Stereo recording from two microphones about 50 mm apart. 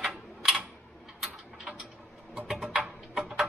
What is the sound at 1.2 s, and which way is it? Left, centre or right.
Mechanisms, centre.